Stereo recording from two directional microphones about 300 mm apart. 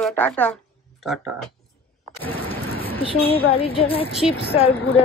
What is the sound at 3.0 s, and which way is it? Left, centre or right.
A woman's voice, centre.